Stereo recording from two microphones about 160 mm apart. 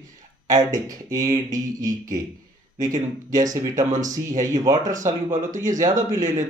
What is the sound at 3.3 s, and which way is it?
Speech, 20° right (ahead or behind).